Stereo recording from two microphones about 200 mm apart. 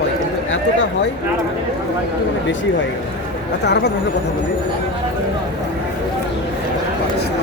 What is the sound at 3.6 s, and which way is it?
Speech, 60° left (ahead or behind).